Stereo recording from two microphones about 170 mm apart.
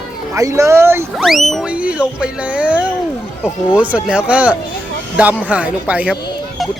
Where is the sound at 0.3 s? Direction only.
20° right (ahead or behind).